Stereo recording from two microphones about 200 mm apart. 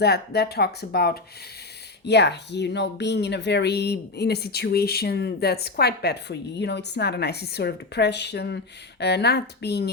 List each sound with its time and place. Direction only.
0.0 s speech: 55° left (ahead or behind)